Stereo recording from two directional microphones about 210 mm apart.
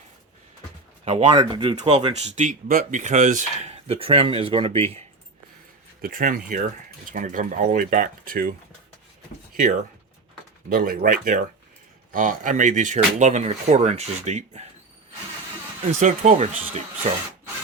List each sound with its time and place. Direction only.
1.0 s speech: 30° right (ahead or behind)
1.7 s speech: 35° right (ahead or behind)
6.0 s speech: 40° right (ahead or behind)
9.6 s speech: 40° right (ahead or behind)
16.0 s speech: 35° right (ahead or behind)